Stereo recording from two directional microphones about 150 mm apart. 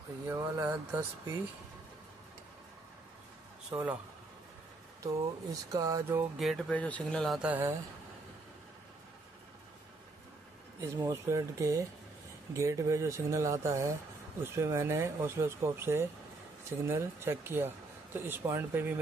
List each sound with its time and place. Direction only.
0.3 s speech: 15° right (ahead or behind)
3.7 s speech: 10° right (ahead or behind)
5.0 s speech: 25° right (ahead or behind)
6.3 s speech: centre (ahead or behind)
7.3 s speech: 10° right (ahead or behind)
10.8 s speech: 20° right (ahead or behind)